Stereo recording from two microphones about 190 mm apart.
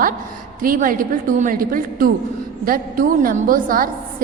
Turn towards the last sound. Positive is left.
turn(degrees=-45)  # may be behind; listen again after turning